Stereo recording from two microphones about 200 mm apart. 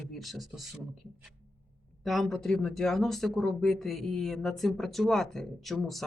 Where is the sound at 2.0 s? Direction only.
Centre (ahead or behind).